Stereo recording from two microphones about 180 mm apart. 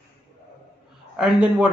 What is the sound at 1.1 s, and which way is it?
Speech, centre (ahead or behind).